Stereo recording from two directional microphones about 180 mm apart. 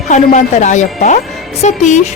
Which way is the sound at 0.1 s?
40° left (ahead or behind).